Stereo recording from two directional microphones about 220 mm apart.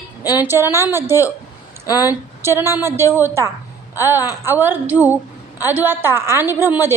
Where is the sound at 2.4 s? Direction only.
10° right (ahead or behind).